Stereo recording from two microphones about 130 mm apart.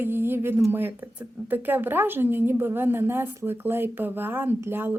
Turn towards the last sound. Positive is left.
turn(degrees=-15)  # may be behind; listen again after turning